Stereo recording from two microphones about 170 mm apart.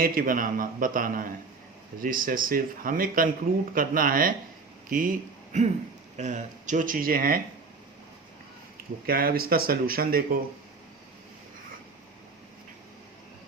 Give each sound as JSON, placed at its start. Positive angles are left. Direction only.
{"t": 0.0, "sound": "a man's voice", "side_deg": -55}
{"t": 9.0, "sound": "speech", "side_deg": -60}